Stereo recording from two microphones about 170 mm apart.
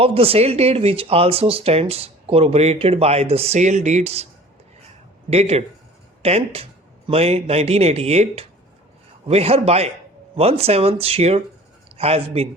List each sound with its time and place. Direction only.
0.0 s speech: 35° right (ahead or behind)
5.3 s a man's voice: 35° right (ahead or behind)